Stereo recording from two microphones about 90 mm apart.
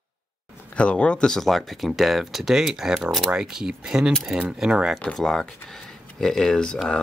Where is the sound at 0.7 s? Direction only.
15° left (ahead or behind); by 4.9 s 10° right (ahead or behind).